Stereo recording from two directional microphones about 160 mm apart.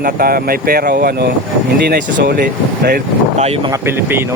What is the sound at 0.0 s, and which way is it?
Speech, 65° right (ahead or behind).